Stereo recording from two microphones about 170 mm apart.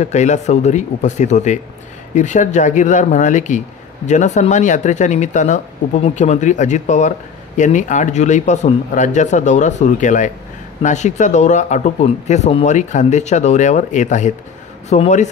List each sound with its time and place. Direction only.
0.0 s speech: 45° left (ahead or behind)